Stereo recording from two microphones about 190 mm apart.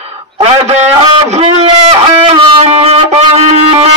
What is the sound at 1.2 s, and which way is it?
Music, 35° right (ahead or behind).